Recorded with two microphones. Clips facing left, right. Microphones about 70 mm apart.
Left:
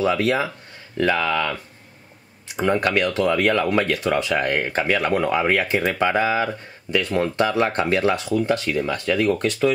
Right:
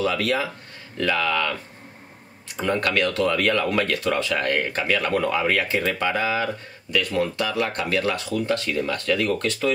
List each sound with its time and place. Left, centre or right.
0.0 s speech: left
2.5 s speech: centre